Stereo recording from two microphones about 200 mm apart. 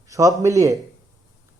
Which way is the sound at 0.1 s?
15° right (ahead or behind).